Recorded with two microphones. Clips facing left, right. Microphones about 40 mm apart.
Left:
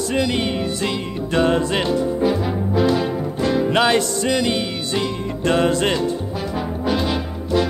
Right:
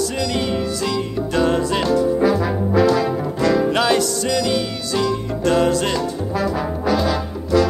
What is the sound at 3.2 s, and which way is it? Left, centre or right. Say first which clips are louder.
Trombone: right 2 dB; right.